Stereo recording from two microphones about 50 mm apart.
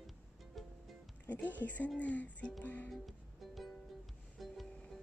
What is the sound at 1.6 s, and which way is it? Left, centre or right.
Speech, left.